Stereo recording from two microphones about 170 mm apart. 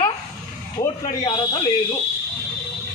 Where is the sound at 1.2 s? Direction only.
30° left (ahead or behind).